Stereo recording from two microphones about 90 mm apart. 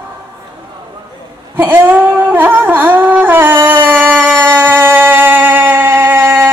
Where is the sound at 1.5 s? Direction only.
25° right (ahead or behind).